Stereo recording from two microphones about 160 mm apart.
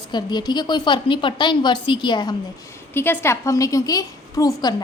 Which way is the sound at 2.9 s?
15° left (ahead or behind).